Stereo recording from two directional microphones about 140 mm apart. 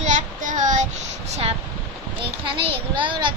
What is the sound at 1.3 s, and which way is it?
A child's voice, 45° right (ahead or behind).